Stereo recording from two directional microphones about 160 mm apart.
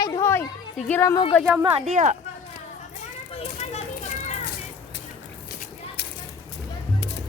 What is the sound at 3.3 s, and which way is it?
Children playing, 40° left (ahead or behind).